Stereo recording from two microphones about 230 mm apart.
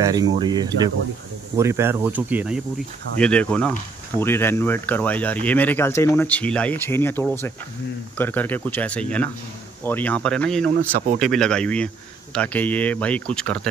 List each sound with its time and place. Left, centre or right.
0.0 s speech: centre
3.2 s speech: centre